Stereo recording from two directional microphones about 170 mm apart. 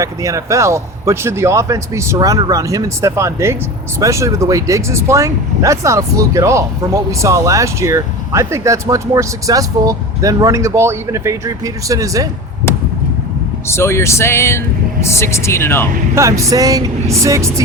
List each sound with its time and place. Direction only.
0.0 s speech: 20° right (ahead or behind)
13.7 s speech: 15° left (ahead or behind)
16.1 s speech: 20° right (ahead or behind)